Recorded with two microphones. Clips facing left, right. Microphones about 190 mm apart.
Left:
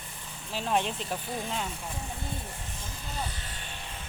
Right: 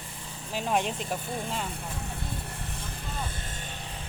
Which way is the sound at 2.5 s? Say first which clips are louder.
Right 3 dB; 65° right (ahead or behind).